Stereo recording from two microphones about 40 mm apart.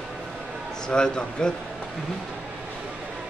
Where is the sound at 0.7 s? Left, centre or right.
Centre.